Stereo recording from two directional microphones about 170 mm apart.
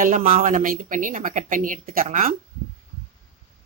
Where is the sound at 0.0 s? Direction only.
50° right (ahead or behind).